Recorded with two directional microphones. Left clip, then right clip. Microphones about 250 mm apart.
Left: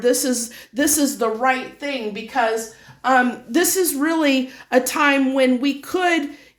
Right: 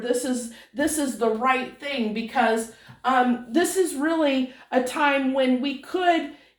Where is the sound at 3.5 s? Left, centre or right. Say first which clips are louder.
Left 5 dB; left.